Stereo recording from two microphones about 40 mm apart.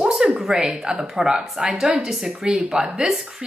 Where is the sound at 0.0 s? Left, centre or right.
Centre.